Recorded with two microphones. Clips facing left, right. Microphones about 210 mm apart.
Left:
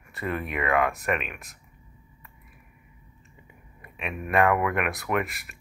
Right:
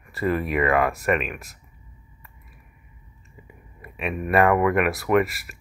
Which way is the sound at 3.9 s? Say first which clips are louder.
Right 4 dB; centre (ahead or behind).